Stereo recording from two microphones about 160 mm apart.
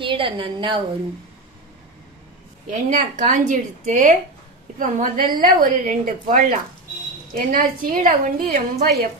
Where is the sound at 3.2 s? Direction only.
50° right (ahead or behind).